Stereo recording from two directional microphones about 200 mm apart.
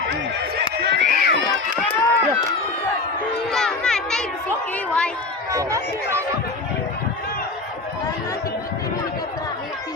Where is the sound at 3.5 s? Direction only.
Centre (ahead or behind).